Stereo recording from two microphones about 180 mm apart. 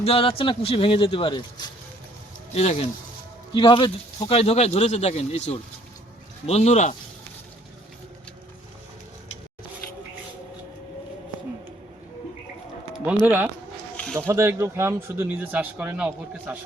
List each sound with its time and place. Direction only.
0.0 s a man's voice: 30° left (ahead or behind)
2.6 s speech: 35° left (ahead or behind)
13.2 s speech: 10° right (ahead or behind)
13.9 s a sound: 5° left (ahead or behind)
14.3 s speech: 15° right (ahead or behind)